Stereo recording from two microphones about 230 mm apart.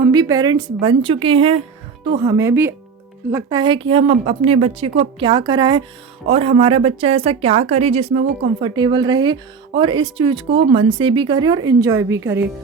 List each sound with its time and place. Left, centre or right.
0.1 s a woman's voice: centre